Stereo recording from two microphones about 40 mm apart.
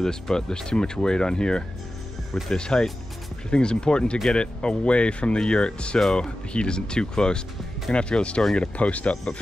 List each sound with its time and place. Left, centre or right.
0.0 s speech: centre